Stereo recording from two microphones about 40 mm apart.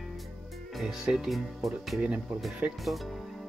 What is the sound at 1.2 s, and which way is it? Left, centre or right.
Speech, centre.